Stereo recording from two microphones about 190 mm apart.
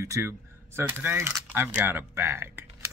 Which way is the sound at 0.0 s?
15° right (ahead or behind).